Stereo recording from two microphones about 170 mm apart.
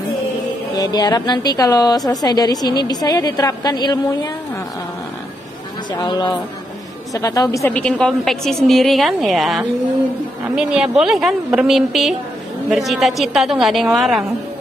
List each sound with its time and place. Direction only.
0.7 s a woman's voice: 25° left (ahead or behind)
5.9 s a woman's voice: 25° left (ahead or behind)
7.7 s a woman's voice: 5° left (ahead or behind)